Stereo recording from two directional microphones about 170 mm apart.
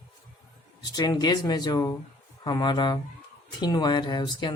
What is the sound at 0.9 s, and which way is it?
Speech, 25° left (ahead or behind).